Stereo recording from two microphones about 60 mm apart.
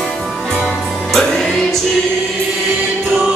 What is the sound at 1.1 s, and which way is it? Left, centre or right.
Music, centre.